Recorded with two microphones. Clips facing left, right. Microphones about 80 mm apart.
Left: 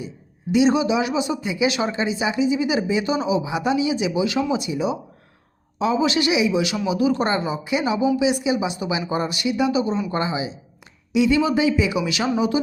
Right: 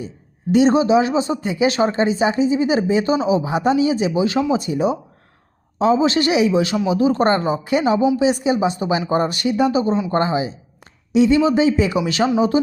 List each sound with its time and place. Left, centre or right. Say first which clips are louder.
0.5 s speech: right 4 dB; right
11.1 s speech: right 4 dB; right